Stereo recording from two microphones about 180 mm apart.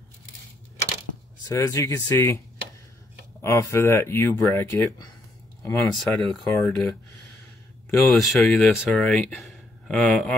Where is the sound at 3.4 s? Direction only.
15° left (ahead or behind).